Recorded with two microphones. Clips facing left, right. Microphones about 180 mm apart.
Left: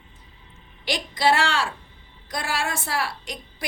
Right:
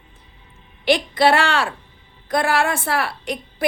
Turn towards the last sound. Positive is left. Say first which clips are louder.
# right 10 dB
turn(degrees=-60)  # may be behind; listen again after turning